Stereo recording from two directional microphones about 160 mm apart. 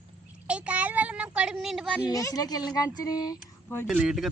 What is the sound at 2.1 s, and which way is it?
Speech, 20° left (ahead or behind).